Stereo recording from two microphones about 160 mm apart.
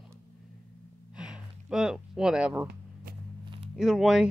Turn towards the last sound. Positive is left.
turn(degrees=0)  # may be behind; listen again after turning